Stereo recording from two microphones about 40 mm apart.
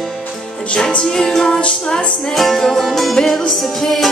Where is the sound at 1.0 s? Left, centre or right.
Centre.